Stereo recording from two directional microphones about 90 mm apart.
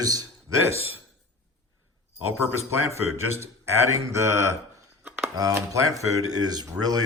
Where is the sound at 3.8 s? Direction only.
35° right (ahead or behind).